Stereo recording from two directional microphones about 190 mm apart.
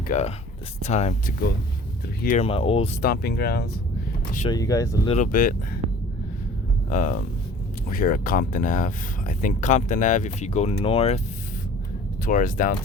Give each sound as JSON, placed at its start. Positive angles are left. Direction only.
{"t": 0.1, "sound": "speech", "side_deg": 35}
{"t": 2.2, "sound": "speech", "side_deg": 40}
{"t": 2.5, "sound": "speech", "side_deg": 30}
{"t": 3.0, "sound": "speech", "side_deg": 55}
{"t": 4.4, "sound": "speech", "side_deg": 20}
{"t": 5.1, "sound": "speech", "side_deg": 45}
{"t": 6.9, "sound": "speech", "side_deg": 45}
{"t": 12.2, "sound": "speech", "side_deg": 45}